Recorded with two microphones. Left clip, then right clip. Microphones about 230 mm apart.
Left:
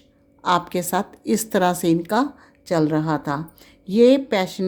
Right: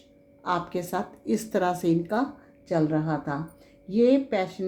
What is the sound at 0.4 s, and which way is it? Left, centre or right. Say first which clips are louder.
A woman's voice: left 8 dB; left.